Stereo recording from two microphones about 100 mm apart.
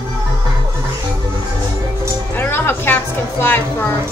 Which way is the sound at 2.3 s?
20° left (ahead or behind).